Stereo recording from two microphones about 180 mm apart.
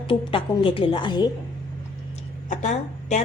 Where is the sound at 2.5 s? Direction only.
40° left (ahead or behind).